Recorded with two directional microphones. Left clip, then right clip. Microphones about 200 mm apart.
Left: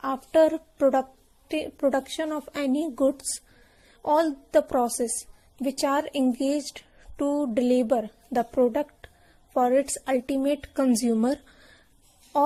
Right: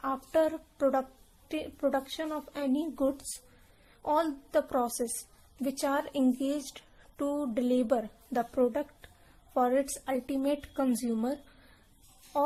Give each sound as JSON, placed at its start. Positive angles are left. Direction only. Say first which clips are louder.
{"t": 0.0, "sound": "a woman's voice", "louder": "left 7 dB", "side_deg": 20}